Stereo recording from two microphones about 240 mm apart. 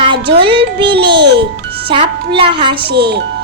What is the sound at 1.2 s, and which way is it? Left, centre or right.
Speech, right.